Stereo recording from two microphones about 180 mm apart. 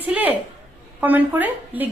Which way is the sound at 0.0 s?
10° right (ahead or behind).